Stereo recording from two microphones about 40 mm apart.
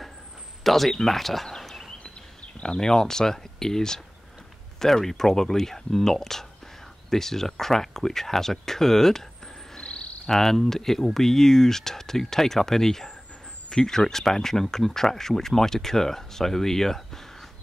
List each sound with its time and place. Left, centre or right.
0.7 s speech: centre
2.4 s a sound: left
2.8 s speech: centre
9.8 s cricket: left
10.2 s speech: centre